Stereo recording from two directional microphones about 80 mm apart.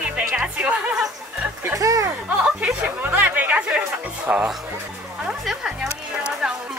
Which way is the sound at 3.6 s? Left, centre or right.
Centre.